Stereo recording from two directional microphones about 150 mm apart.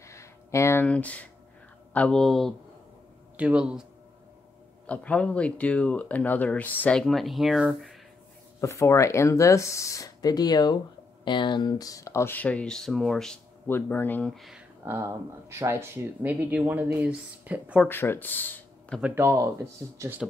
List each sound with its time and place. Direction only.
0.0 s speech: 20° left (ahead or behind); by 3.8 s 5° right (ahead or behind)
4.8 s speech: 10° left (ahead or behind)
8.5 s speech: 20° left (ahead or behind); by 14.6 s centre (ahead or behind)
14.9 s speech: 15° right (ahead or behind)
17.8 s speech: 15° left (ahead or behind)
18.9 s speech: 10° right (ahead or behind)